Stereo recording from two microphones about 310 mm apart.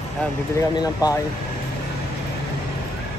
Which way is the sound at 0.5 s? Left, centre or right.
Centre.